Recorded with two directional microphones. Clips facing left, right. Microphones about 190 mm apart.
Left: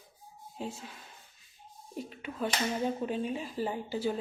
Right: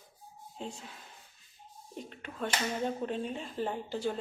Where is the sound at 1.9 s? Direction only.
5° left (ahead or behind).